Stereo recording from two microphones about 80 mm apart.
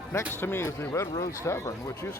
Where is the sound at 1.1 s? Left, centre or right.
Left.